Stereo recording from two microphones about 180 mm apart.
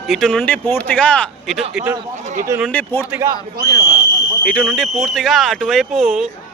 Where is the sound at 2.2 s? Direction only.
40° right (ahead or behind).